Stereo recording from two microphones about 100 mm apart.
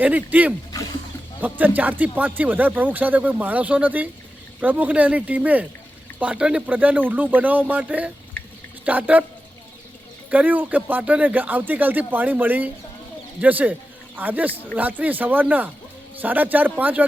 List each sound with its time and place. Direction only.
0.0 s a man's voice: 15° right (ahead or behind)
10.3 s speech: 15° right (ahead or behind)